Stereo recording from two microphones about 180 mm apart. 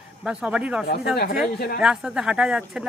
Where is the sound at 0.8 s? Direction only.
60° left (ahead or behind).